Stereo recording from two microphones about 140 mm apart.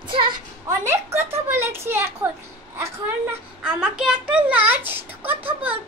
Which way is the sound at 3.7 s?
5° right (ahead or behind).